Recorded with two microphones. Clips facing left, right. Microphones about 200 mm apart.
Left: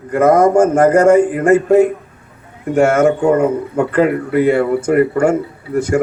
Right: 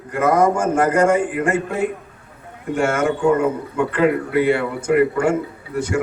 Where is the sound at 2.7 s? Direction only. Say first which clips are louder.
Left 7 dB; 40° left (ahead or behind).